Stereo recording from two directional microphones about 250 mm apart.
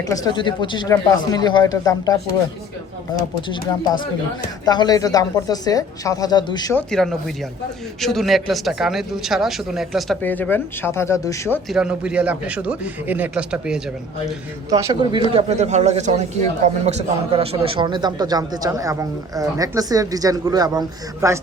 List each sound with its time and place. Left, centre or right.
0.1 s speech: centre
3.5 s speech: centre
6.9 s speech: centre
11.7 s speech: centre
14.7 s a man's voice: centre